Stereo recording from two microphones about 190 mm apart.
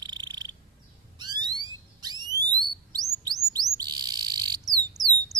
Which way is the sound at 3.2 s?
20° right (ahead or behind).